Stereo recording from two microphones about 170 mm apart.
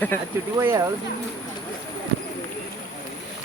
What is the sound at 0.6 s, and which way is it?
Speech, 15° right (ahead or behind).